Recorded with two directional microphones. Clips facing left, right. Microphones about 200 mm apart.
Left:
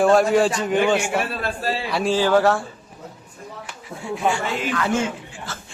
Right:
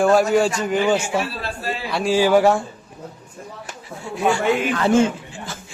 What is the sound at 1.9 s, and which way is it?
Speech, centre (ahead or behind).